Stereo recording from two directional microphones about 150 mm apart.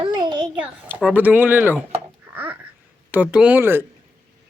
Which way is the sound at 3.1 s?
10° right (ahead or behind).